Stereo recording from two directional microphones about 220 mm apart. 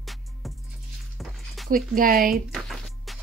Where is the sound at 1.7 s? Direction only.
40° right (ahead or behind).